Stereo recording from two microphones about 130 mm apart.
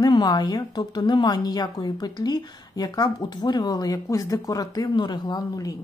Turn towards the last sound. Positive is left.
turn(degrees=30)  # may be behind; listen again after turning